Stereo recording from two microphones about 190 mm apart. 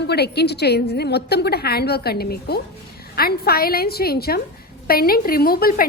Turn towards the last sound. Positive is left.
turn(degrees=50)  # may be behind; listen again after turning